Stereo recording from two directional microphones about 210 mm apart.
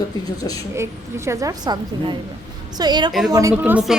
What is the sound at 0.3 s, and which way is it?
Speech, 20° left (ahead or behind).